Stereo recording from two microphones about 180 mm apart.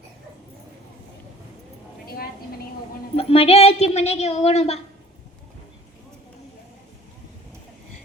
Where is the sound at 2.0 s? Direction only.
55° left (ahead or behind).